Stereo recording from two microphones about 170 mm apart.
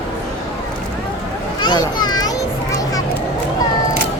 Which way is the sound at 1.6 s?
25° left (ahead or behind).